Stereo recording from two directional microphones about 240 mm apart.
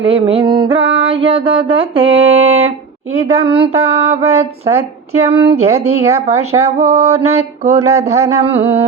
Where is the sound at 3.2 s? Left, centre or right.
Right.